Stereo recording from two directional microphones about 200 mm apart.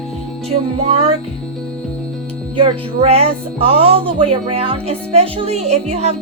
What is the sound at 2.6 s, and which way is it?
Speech, 25° right (ahead or behind).